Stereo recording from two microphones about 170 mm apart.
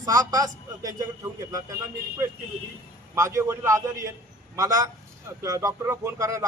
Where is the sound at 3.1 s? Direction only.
20° right (ahead or behind).